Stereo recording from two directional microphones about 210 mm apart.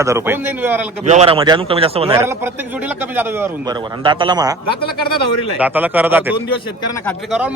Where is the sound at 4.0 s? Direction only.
25° right (ahead or behind).